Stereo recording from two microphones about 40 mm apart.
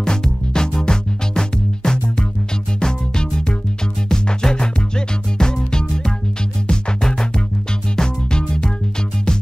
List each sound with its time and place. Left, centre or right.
0.0 s music: centre